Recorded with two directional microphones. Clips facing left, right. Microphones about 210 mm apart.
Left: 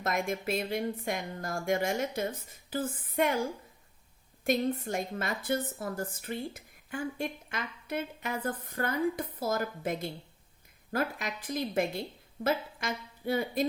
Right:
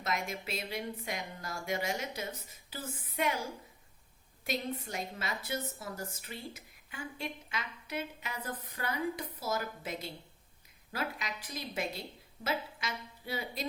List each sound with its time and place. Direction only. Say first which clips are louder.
0.0 s a woman's voice: left 5 dB; 50° left (ahead or behind)
4.4 s a woman's voice: left 8 dB; 50° left (ahead or behind)